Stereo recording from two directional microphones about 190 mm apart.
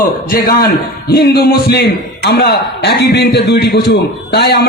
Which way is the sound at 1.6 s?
60° left (ahead or behind).